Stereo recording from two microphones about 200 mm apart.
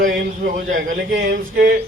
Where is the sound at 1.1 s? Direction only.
45° right (ahead or behind).